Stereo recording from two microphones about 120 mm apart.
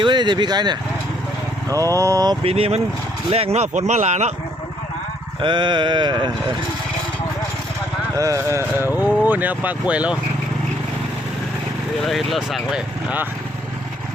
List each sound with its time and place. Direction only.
0.0 s a sound: 40° right (ahead or behind)
1.7 s vehicle: 25° right (ahead or behind)
2.4 s speech: 55° right (ahead or behind); by 4.3 s 75° right (ahead or behind)
5.4 s a sound: 40° right (ahead or behind)
8.2 s speech: 25° right (ahead or behind); by 10.2 s 10° right (ahead or behind)
12.0 s speech: centre (ahead or behind)